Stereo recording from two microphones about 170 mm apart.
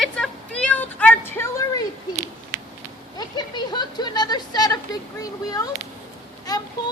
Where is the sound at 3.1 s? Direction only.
25° left (ahead or behind).